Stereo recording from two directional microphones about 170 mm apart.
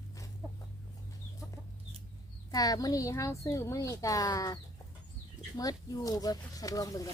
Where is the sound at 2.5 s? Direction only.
20° left (ahead or behind).